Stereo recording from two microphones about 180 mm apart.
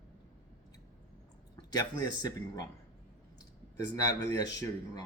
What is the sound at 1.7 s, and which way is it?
Speech, 20° left (ahead or behind).